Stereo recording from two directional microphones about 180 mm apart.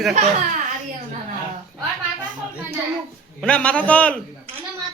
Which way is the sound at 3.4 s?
5° left (ahead or behind).